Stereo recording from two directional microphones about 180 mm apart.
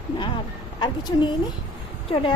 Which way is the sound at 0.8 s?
25° left (ahead or behind).